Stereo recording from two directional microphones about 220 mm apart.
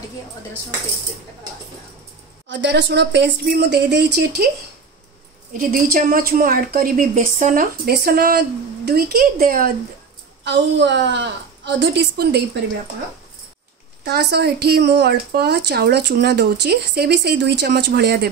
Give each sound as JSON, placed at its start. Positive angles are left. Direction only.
{"t": 2.5, "sound": "speech", "side_deg": -55}
{"t": 5.6, "sound": "a woman's voice", "side_deg": -40}
{"t": 10.4, "sound": "speech", "side_deg": -50}
{"t": 14.0, "sound": "speech", "side_deg": -45}